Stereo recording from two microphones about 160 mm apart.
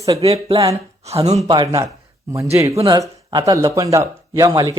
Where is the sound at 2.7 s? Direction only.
30° right (ahead or behind).